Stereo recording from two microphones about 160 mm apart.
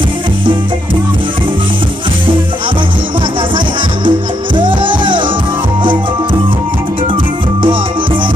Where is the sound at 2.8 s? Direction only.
30° right (ahead or behind).